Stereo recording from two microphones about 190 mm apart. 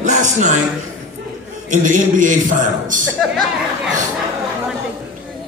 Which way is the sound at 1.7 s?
45° right (ahead or behind).